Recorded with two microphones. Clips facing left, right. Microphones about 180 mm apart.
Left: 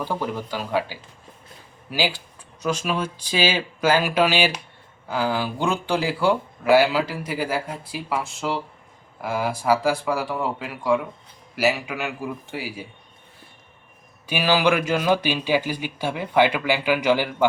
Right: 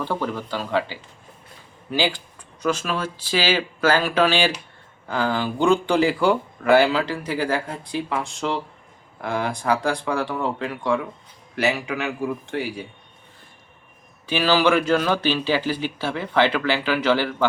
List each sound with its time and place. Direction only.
0.0 s a man's voice: 10° left (ahead or behind)
14.3 s a man's voice: 10° left (ahead or behind)